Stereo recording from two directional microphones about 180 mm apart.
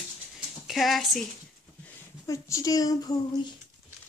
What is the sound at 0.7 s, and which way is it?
Speech, centre (ahead or behind).